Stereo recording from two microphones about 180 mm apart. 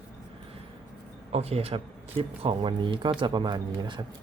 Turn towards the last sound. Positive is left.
turn(degrees=-25)  # may be behind; listen again after turning